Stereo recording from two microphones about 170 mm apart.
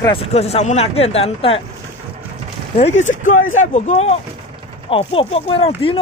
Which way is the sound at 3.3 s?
50° left (ahead or behind).